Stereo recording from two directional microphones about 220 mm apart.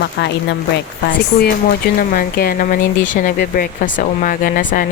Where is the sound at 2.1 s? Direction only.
45° left (ahead or behind).